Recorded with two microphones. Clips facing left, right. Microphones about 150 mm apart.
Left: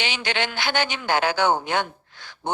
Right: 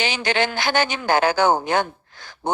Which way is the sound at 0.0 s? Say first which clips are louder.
Right 5 dB; 40° right (ahead or behind).